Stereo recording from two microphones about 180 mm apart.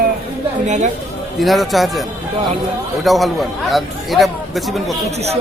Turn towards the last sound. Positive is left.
turn(degrees=0)  # may be behind; listen again after turning